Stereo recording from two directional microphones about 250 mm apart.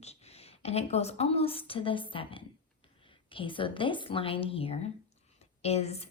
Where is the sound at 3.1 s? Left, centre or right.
Left.